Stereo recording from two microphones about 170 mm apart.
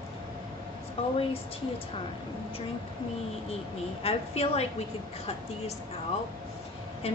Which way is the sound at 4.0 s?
35° left (ahead or behind).